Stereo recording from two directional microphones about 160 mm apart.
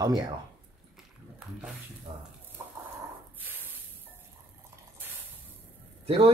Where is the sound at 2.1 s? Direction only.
30° right (ahead or behind).